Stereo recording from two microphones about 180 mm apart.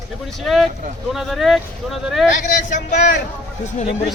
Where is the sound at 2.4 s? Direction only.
45° left (ahead or behind).